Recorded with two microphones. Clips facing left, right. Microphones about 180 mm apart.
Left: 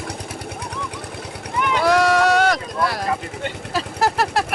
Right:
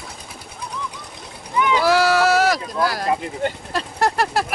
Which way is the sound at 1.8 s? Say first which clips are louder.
Left 2 dB; 5° right (ahead or behind).